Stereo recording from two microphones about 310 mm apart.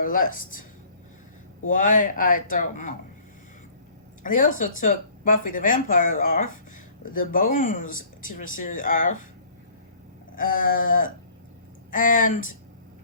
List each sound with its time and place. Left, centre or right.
1.6 s speech: left
4.2 s speech: left
10.3 s speech: left